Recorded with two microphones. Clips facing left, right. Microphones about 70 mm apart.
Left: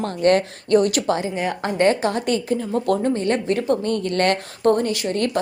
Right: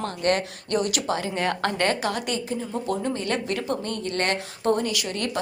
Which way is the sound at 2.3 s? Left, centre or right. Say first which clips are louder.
Left 7 dB; left.